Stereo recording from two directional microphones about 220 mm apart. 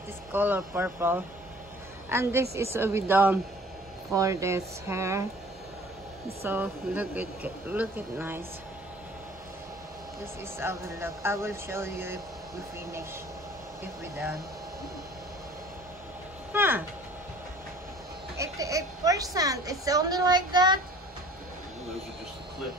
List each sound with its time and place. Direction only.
0.3 s a woman's voice: 10° right (ahead or behind)
6.4 s speech: 10° right (ahead or behind)
10.6 s speech: 10° right (ahead or behind)
16.5 s a sound: 10° right (ahead or behind)
18.4 s speech: 15° right (ahead or behind)